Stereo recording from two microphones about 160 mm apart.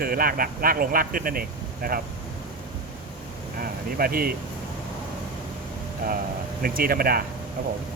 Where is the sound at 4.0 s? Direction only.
70° right (ahead or behind).